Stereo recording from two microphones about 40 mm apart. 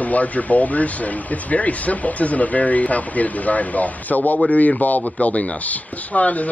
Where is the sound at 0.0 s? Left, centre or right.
Left.